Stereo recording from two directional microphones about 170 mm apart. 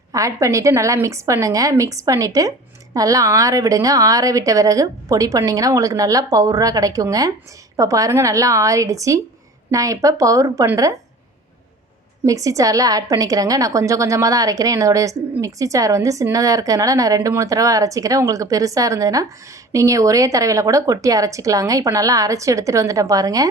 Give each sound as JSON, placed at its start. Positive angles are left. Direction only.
{"t": 0.1, "sound": "a woman's voice", "side_deg": -20}
{"t": 12.2, "sound": "a woman's voice", "side_deg": -20}